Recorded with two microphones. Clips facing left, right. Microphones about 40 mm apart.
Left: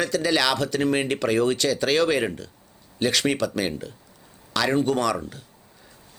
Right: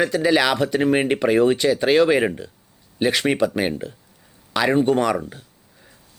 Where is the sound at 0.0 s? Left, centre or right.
Centre.